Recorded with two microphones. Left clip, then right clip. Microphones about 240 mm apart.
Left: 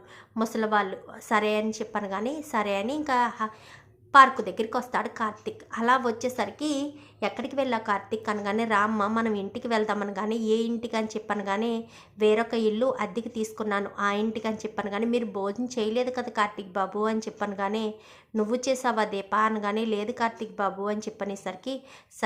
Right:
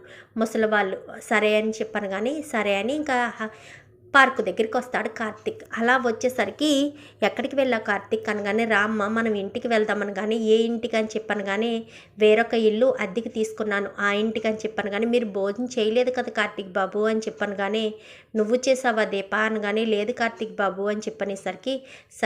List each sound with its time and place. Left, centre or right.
0.3 s speech: centre